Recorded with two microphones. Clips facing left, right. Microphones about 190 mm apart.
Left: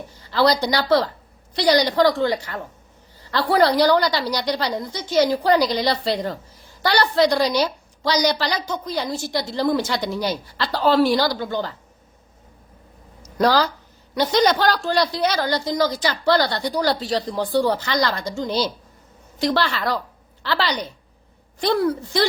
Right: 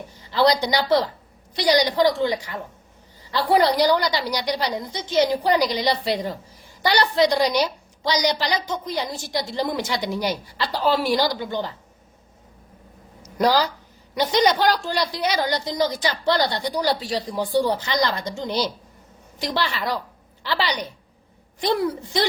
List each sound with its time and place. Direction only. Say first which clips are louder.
0.3 s a woman's voice: left 1 dB; 20° right (ahead or behind)
13.2 s a woman's voice: left 1 dB; 15° right (ahead or behind)